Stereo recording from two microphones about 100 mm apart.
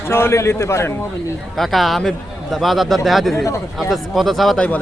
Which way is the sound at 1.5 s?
Centre (ahead or behind).